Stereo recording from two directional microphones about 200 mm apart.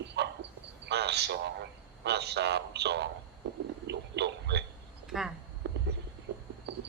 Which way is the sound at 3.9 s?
60° right (ahead or behind).